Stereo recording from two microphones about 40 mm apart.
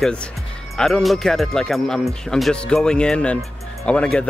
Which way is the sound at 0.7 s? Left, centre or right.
Centre.